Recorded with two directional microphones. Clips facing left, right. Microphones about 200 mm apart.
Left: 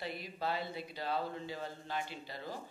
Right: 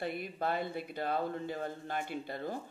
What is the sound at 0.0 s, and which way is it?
Speech, 55° right (ahead or behind).